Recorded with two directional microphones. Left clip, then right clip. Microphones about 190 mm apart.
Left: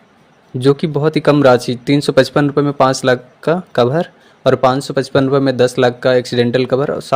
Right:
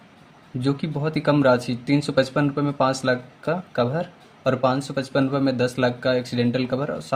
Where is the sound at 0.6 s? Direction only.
45° left (ahead or behind).